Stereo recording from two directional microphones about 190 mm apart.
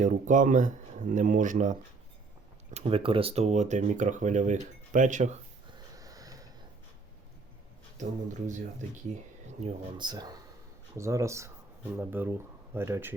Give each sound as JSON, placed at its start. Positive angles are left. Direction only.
{"t": 0.0, "sound": "speech", "side_deg": -40}
{"t": 2.7, "sound": "speech", "side_deg": -30}
{"t": 5.7, "sound": "a sound", "side_deg": -20}
{"t": 7.9, "sound": "speech", "side_deg": -40}
{"t": 9.6, "sound": "speech", "side_deg": -25}